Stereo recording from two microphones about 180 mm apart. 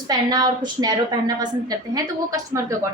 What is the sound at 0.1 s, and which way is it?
A woman's voice, 20° right (ahead or behind).